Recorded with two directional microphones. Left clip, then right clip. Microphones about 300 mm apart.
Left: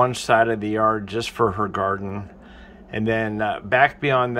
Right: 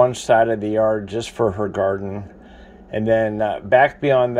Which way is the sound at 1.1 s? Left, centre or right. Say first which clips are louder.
Right 1 dB; left.